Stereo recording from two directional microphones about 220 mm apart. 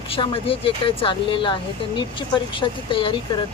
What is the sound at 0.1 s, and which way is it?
Speech, 25° left (ahead or behind).